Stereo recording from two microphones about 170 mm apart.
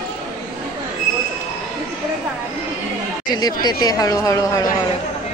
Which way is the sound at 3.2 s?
25° left (ahead or behind).